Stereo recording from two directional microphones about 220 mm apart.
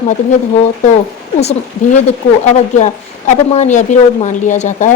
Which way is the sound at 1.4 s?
30° left (ahead or behind).